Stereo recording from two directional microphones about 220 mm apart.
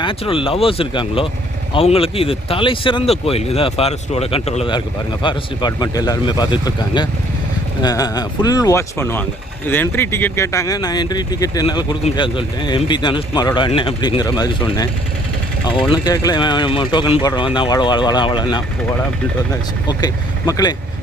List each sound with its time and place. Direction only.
0.0 s speech: 25° left (ahead or behind)
15.9 s speech: 15° left (ahead or behind)
19.9 s speech: 20° left (ahead or behind)